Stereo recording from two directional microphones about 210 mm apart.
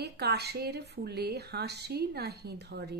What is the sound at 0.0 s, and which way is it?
A woman's voice, 50° right (ahead or behind).